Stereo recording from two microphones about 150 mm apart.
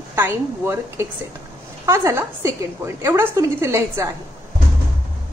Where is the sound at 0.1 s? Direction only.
15° right (ahead or behind).